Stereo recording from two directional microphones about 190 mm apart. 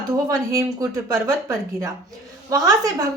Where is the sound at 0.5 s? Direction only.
20° right (ahead or behind).